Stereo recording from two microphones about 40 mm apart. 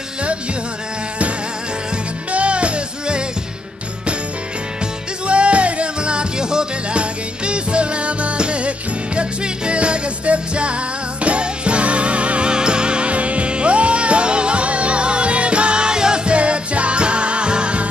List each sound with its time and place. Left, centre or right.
2.3 s music: right
5.2 s music: right
16.3 s music: right